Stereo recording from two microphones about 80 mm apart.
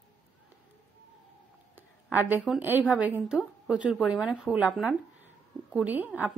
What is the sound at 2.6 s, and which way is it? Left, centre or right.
Speech, right.